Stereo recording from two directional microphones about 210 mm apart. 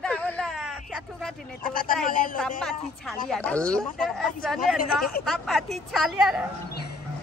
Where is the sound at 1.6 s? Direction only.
40° left (ahead or behind).